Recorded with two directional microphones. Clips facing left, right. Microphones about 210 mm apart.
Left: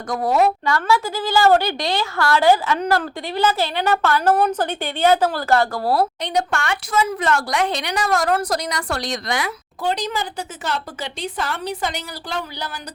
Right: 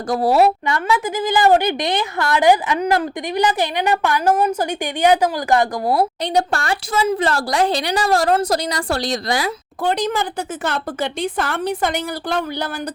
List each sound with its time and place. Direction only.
0.1 s speech: 30° right (ahead or behind)
0.6 s a woman's voice: 15° right (ahead or behind)
6.2 s speech: 35° right (ahead or behind)
9.8 s a woman's voice: 50° right (ahead or behind)